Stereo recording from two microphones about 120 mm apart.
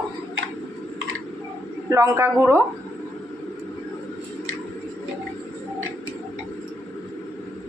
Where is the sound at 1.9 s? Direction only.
25° right (ahead or behind).